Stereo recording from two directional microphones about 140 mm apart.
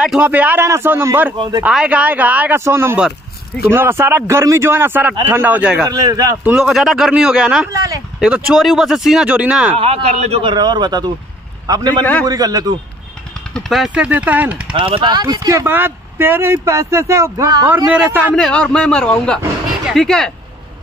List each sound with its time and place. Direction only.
0.0 s speech: 10° right (ahead or behind)
3.0 s a sound: centre (ahead or behind)
3.6 s speech: 15° right (ahead or behind)
5.9 s speech: 25° right (ahead or behind)
6.4 s speech: 5° right (ahead or behind)
7.7 s a sound: 25° right (ahead or behind)
8.2 s speech: 5° right (ahead or behind)
9.8 s a man's voice: 45° right (ahead or behind)
10.5 s a man's voice: 30° right (ahead or behind)
12.0 s a man's voice: 10° left (ahead or behind)
12.3 s speech: 25° right (ahead or behind)
13.5 s speech: centre (ahead or behind)
14.7 s speech: 40° right (ahead or behind)
18.3 s a man's voice: 5° left (ahead or behind)